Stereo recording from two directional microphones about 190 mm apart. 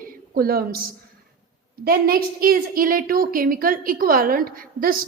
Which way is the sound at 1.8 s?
50° right (ahead or behind).